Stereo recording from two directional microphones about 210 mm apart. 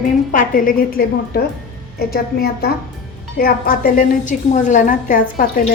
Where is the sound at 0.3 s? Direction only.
40° left (ahead or behind).